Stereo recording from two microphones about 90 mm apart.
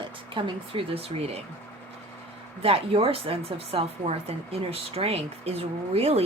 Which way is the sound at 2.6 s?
90° right.